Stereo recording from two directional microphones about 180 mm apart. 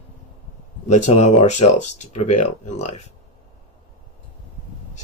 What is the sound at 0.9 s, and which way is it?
Speech, 40° left (ahead or behind).